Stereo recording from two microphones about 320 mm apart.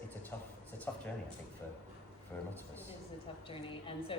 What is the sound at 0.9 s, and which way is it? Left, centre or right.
Speech, centre.